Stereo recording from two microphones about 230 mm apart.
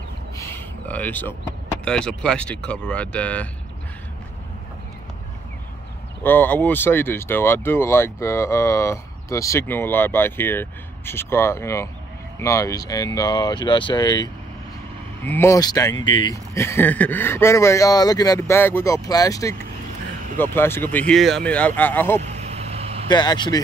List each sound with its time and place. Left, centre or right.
0.4 s speech: centre
6.2 s speech: centre
22.2 s vehicle: right
23.0 s speech: centre